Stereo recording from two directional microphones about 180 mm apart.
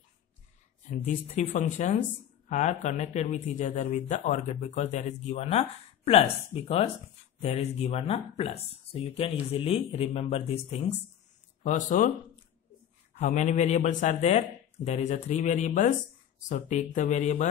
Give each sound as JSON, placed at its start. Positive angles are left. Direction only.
{"t": 0.9, "sound": "speech", "side_deg": 40}
{"t": 13.2, "sound": "speech", "side_deg": 40}